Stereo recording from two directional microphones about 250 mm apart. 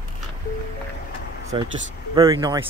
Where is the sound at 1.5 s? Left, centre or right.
Centre.